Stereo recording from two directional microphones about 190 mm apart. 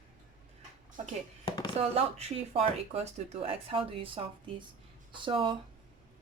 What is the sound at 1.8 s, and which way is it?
Speech, 35° right (ahead or behind).